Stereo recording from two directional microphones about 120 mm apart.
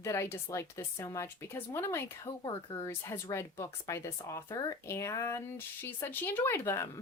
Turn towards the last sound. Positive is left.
turn(degrees=20)  # may be behind; listen again after turning